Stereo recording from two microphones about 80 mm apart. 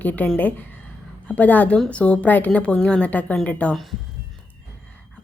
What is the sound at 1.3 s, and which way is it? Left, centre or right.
A woman's voice, centre.